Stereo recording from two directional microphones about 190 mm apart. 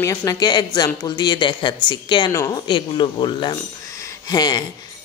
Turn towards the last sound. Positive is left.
turn(degrees=20)  # may be behind; listen again after turning